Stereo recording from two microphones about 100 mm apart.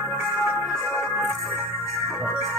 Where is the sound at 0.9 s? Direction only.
20° left (ahead or behind).